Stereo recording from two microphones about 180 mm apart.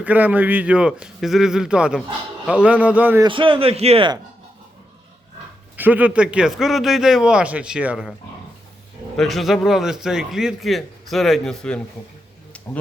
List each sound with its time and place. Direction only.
0.0 s a man's voice: 10° right (ahead or behind)
3.2 s speech: 30° right (ahead or behind)
5.7 s a man's voice: 10° right (ahead or behind)
9.1 s a man's voice: centre (ahead or behind)
12.5 s a sound: 5° left (ahead or behind)